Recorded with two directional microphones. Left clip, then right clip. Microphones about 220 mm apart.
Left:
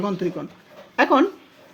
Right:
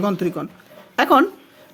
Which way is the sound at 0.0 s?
25° right (ahead or behind).